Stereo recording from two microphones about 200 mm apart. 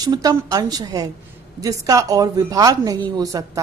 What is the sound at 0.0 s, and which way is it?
A woman's voice, 20° right (ahead or behind).